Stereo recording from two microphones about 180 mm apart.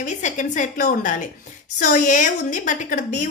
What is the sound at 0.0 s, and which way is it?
A woman's voice, 45° left (ahead or behind).